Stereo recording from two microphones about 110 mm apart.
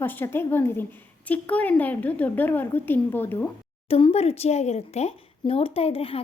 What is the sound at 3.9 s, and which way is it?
Speech, 60° left (ahead or behind).